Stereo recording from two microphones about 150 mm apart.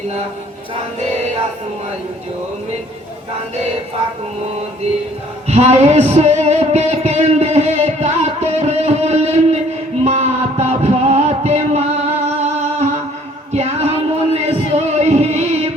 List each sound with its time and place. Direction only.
5.5 s music: 45° right (ahead or behind)
13.5 s a sound: 45° right (ahead or behind)
14.7 s music: 45° right (ahead or behind)